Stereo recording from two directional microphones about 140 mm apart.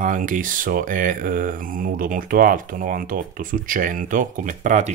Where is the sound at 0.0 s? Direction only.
65° right (ahead or behind).